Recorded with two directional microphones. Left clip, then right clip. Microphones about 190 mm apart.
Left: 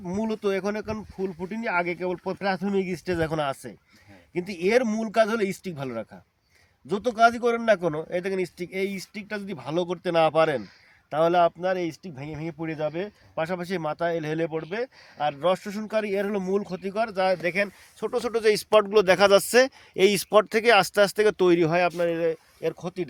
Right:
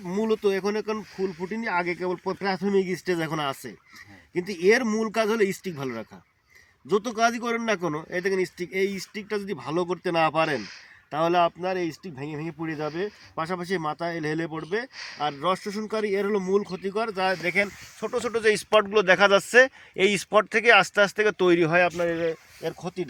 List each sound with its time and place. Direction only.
0.9 s speech: 5° left (ahead or behind)
1.7 s a man's voice: 35° left (ahead or behind)